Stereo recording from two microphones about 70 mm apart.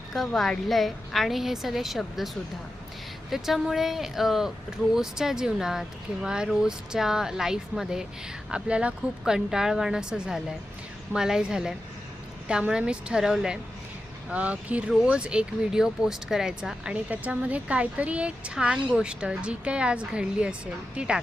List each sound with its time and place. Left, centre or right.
0.1 s a woman's voice: centre
14.3 s speech: centre